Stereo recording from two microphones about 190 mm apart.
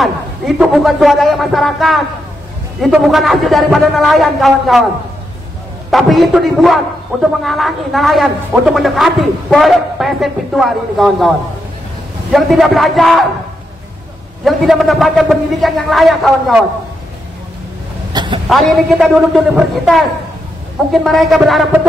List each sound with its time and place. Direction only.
0.0 s a man's voice: centre (ahead or behind)
5.9 s a man's voice: centre (ahead or behind)
14.4 s a man's voice: centre (ahead or behind)
18.1 s a sound: 25° right (ahead or behind)
18.5 s a man's voice: centre (ahead or behind)